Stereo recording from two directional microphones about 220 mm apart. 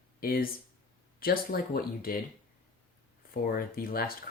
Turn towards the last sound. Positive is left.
turn(degrees=40)  # may be behind; listen again after turning